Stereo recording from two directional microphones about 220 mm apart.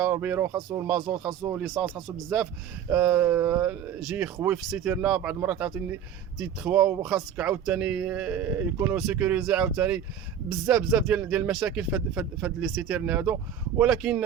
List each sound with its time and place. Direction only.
0.0 s a man's voice: 5° right (ahead or behind)